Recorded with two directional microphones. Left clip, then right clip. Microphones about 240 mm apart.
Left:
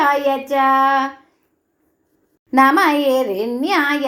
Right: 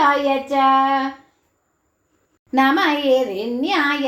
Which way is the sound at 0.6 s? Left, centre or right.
Left.